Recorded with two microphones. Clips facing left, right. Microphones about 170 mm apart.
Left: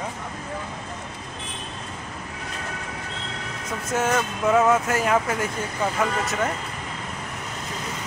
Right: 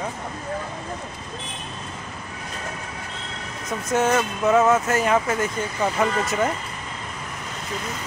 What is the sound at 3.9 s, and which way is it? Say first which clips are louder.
Speech: right 3 dB; 5° left (ahead or behind).